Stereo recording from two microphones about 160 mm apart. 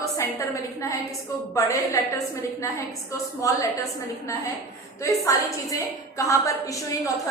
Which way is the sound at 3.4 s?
20° left (ahead or behind).